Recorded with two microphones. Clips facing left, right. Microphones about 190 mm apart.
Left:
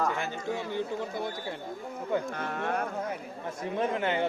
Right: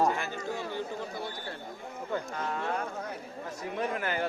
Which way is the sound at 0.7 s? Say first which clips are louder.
Left 3 dB; 20° left (ahead or behind).